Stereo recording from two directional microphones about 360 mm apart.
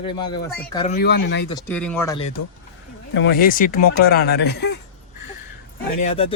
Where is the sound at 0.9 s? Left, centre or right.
Left.